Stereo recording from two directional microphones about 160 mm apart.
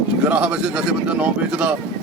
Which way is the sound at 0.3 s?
5° right (ahead or behind).